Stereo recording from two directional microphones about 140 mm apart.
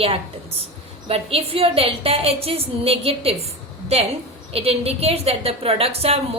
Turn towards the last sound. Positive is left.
turn(degrees=-45)  # may be behind; listen again after turning